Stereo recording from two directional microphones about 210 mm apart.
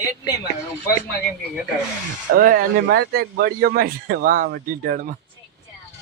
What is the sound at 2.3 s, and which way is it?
Speech, 40° right (ahead or behind).